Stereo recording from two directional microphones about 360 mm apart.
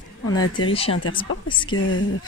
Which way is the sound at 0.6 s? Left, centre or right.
Centre.